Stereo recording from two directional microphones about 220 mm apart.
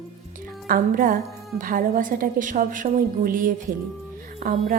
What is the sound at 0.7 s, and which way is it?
A woman's voice, 40° right (ahead or behind).